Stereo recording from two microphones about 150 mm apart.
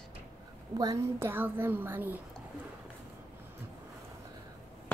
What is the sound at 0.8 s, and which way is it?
A woman's voice, 20° right (ahead or behind).